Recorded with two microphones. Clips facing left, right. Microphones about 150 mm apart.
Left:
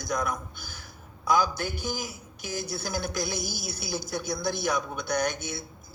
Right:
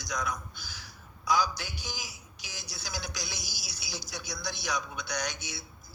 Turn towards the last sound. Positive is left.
turn(degrees=50)  # may be behind; listen again after turning